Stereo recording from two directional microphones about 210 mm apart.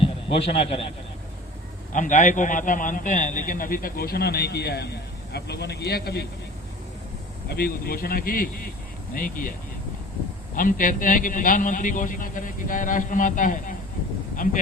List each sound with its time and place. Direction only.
0.0 s a man's voice: 25° left (ahead or behind)
1.9 s a man's voice: 35° left (ahead or behind)
7.4 s a man's voice: 45° left (ahead or behind)